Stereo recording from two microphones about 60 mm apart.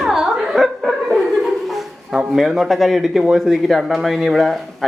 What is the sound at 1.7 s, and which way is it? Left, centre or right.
A woman's voice, centre.